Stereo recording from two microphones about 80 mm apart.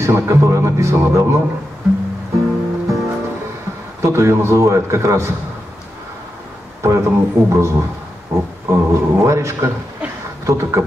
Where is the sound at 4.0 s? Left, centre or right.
Right.